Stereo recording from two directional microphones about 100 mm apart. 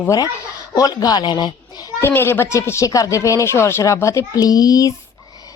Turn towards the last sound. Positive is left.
turn(degrees=35)  # may be behind; listen again after turning